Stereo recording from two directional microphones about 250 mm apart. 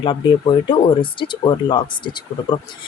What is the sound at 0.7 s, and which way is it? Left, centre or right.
Speech, centre.